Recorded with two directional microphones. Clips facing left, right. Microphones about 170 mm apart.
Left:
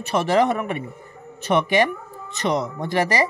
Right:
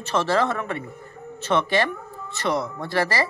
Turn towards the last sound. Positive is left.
turn(degrees=20)  # may be behind; listen again after turning